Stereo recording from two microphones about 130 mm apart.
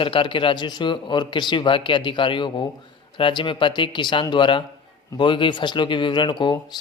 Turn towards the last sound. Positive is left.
turn(degrees=35)  # may be behind; listen again after turning